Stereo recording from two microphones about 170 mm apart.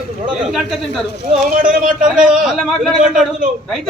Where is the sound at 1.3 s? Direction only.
45° right (ahead or behind).